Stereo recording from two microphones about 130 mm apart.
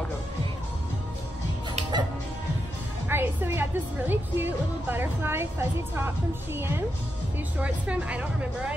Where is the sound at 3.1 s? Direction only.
15° right (ahead or behind).